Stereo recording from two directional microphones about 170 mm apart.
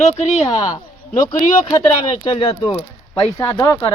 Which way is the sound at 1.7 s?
20° left (ahead or behind).